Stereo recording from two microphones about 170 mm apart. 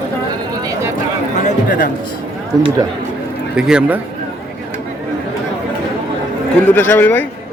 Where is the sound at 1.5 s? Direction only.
55° left (ahead or behind).